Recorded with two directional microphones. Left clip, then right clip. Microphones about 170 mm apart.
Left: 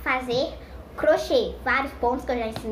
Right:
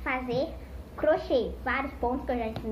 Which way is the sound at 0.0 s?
25° left (ahead or behind).